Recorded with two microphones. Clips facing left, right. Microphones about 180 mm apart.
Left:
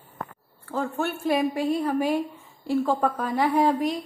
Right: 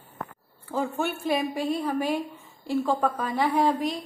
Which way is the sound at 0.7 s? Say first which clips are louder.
Even; 5° right (ahead or behind).